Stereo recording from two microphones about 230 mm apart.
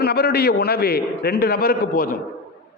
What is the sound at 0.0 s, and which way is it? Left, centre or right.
A man's voice, left.